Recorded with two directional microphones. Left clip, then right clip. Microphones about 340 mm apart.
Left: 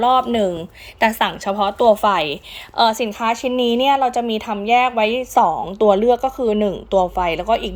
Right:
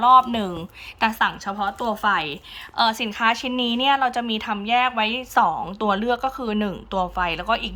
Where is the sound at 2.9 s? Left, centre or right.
Right.